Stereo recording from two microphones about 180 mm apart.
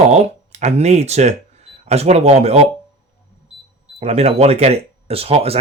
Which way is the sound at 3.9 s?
35° right (ahead or behind).